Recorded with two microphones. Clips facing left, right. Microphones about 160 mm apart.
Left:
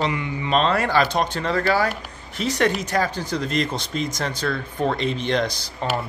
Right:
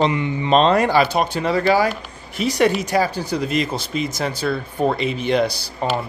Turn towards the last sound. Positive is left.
turn(degrees=-10)  # may be behind; listen again after turning